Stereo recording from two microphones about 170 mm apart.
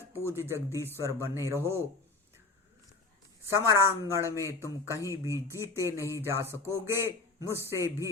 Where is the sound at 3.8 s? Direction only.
15° right (ahead or behind).